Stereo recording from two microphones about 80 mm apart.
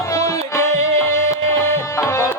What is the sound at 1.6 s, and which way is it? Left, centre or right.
Music, left.